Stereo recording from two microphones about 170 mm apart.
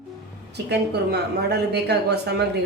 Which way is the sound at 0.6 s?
75° right (ahead or behind).